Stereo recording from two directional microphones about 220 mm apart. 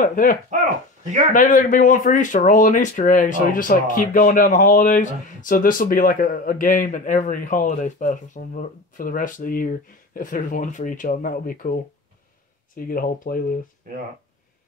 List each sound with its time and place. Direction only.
0.0 s speech: 40° left (ahead or behind)
1.0 s speech: 35° right (ahead or behind)
1.3 s speech: 35° left (ahead or behind)